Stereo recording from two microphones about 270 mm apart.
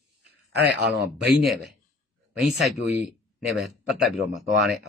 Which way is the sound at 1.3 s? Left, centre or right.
Centre.